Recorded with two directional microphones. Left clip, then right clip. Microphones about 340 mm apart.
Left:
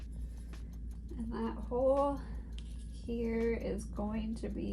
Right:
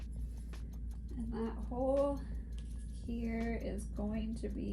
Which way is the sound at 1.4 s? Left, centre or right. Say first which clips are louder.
Left 5 dB; centre.